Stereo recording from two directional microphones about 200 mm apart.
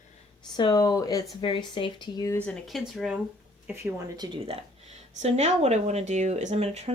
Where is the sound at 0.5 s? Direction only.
20° left (ahead or behind); by 3.2 s centre (ahead or behind).